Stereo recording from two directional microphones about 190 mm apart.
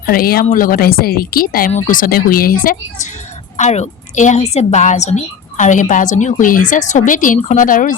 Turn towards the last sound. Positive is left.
turn(degrees=45)  # may be behind; listen again after turning